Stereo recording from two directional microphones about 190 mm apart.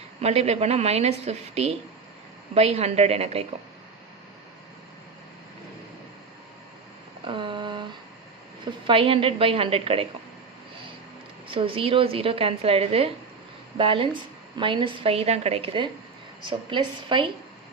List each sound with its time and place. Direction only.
0.2 s a woman's voice: 35° right (ahead or behind)
7.3 s a sound: 25° right (ahead or behind)
8.6 s a woman's voice: 30° right (ahead or behind)
11.4 s a woman's voice: 30° right (ahead or behind)